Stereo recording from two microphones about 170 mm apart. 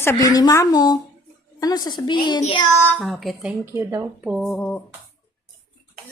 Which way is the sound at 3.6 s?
15° right (ahead or behind).